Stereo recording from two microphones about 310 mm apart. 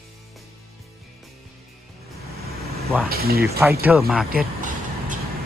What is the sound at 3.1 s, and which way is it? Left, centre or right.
Speech, right.